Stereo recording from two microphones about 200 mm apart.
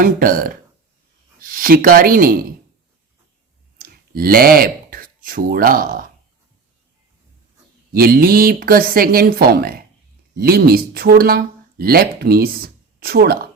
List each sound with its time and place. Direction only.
0.0 s speech: 45° right (ahead or behind)
3.8 s speech: 50° right (ahead or behind)
7.9 s speech: 50° right (ahead or behind)